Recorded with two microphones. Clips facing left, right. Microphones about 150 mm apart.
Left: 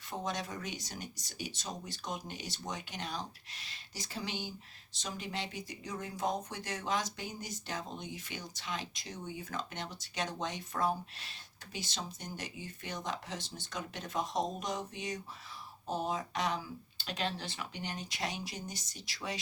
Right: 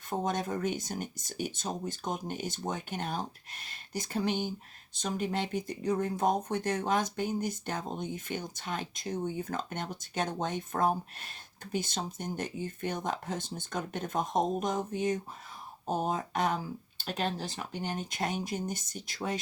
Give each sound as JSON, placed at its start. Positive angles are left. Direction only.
{"t": 0.1, "sound": "speech", "side_deg": -50}